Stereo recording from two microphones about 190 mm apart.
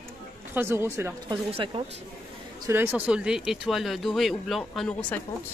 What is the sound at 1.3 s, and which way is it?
Speech, 25° right (ahead or behind).